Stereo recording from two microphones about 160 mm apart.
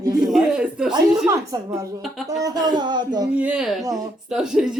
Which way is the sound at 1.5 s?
20° right (ahead or behind).